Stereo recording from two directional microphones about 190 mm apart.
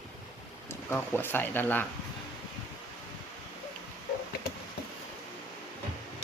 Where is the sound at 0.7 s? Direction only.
10° left (ahead or behind).